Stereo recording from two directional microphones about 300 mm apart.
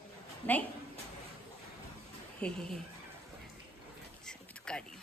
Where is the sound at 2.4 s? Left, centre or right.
Centre.